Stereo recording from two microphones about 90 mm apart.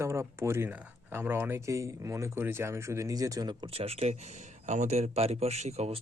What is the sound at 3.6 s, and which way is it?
Speech, 90° right.